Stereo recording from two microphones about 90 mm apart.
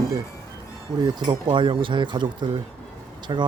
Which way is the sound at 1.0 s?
60° right (ahead or behind).